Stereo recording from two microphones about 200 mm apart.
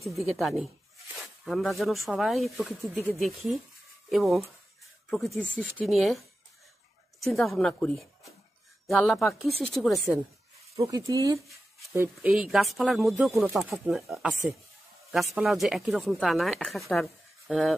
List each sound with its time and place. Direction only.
0.0 s speech: centre (ahead or behind)
10.8 s speech: 15° right (ahead or behind)
15.3 s speech: centre (ahead or behind)